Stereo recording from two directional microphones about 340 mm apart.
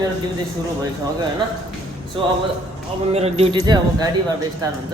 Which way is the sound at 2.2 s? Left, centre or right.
Centre.